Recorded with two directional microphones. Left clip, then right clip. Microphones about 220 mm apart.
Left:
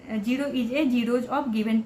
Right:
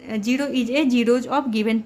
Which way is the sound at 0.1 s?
55° right (ahead or behind).